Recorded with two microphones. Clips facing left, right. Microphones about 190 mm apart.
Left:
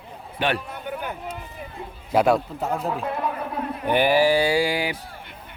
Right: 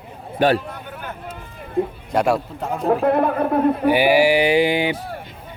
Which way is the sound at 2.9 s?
60° right (ahead or behind).